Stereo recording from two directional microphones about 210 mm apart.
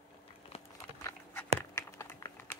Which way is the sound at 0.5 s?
30° left (ahead or behind).